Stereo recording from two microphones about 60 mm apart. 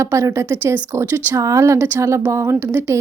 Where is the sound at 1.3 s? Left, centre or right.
Right.